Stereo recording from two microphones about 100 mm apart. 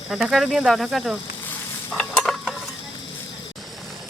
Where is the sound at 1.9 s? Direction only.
10° left (ahead or behind).